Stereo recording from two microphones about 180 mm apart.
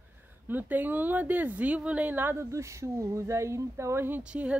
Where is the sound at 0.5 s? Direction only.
10° right (ahead or behind).